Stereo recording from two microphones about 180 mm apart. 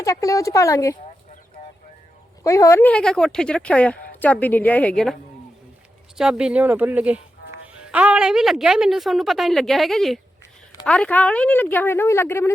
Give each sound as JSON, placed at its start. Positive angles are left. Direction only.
{"t": 0.0, "sound": "a woman's voice", "side_deg": 20}
{"t": 2.4, "sound": "a woman's voice", "side_deg": 15}
{"t": 6.1, "sound": "a woman's voice", "side_deg": -5}